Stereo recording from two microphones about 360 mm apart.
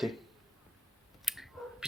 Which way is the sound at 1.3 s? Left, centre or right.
Centre.